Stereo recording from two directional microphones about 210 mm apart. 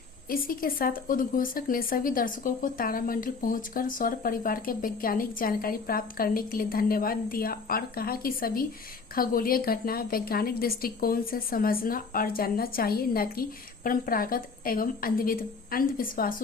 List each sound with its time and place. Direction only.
0.3 s a woman's voice: 45° left (ahead or behind)